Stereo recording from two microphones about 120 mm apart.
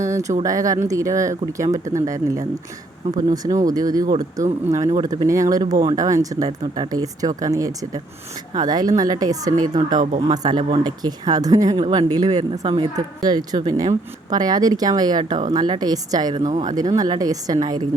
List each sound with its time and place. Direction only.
0.0 s a sound: 25° right (ahead or behind)
0.4 s speech: 30° right (ahead or behind)
16.4 s speech: 90° right
16.6 s speech: 35° right (ahead or behind)